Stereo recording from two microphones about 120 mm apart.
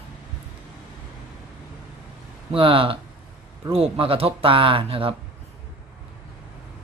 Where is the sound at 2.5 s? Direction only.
50° right (ahead or behind).